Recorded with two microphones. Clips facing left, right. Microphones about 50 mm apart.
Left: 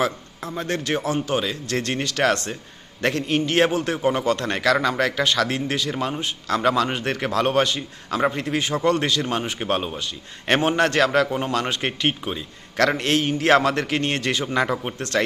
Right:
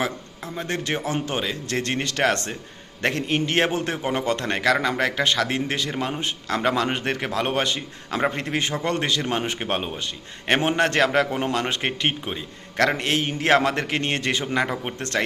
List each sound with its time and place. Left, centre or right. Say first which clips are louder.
0.0 s a man's voice: left 3 dB; centre; by 1.4 s right
1.4 s speech: left 1 dB; centre
2.0 s speech: left 2 dB; right
8.4 s a man's voice: left 2 dB; right
14.4 s a man's voice: left 2 dB; centre
14.9 s speech: left 2 dB; right